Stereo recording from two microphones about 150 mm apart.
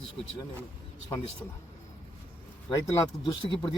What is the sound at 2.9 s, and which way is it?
Speech, 30° left (ahead or behind).